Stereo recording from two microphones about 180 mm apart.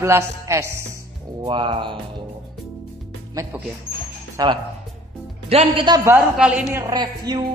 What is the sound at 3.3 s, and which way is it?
A man's voice, 15° right (ahead or behind).